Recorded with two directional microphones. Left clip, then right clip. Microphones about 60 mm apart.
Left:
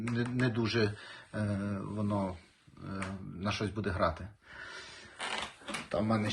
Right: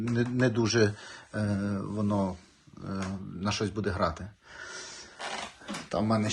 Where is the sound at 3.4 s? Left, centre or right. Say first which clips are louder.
Right 4 dB; right.